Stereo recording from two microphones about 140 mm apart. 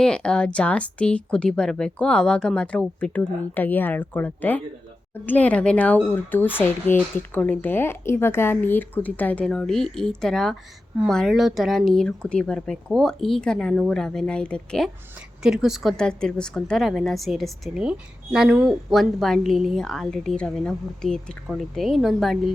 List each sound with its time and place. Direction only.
0.0 s a woman's voice: 5° left (ahead or behind)
15.4 s a woman's voice: 5° right (ahead or behind)